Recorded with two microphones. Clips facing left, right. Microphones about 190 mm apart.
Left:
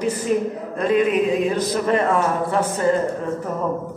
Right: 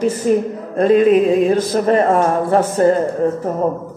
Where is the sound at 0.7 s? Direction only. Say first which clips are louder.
Right 7 dB; 35° right (ahead or behind).